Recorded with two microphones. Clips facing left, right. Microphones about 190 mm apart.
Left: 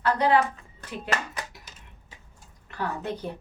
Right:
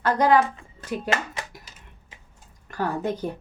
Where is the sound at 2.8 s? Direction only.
45° right (ahead or behind).